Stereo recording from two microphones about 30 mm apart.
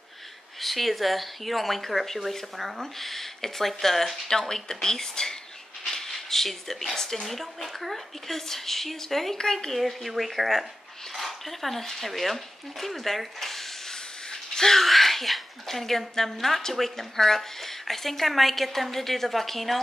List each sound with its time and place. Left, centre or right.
0.6 s a woman's voice: centre
4.3 s a woman's voice: centre
7.3 s a woman's voice: centre
9.4 s speech: centre
9.7 s a woman's voice: centre
12.8 s a sound: centre
14.3 s a sound: centre
14.8 s a woman's voice: centre